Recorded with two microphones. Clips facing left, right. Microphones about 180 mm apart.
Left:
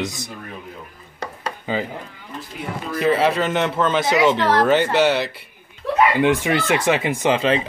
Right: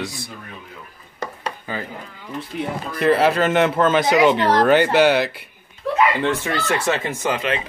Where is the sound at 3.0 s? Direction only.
Centre (ahead or behind).